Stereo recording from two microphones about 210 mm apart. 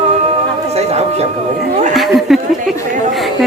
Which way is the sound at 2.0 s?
Centre (ahead or behind).